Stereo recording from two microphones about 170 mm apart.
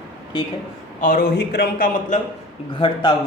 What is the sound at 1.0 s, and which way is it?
Speech, 60° left (ahead or behind).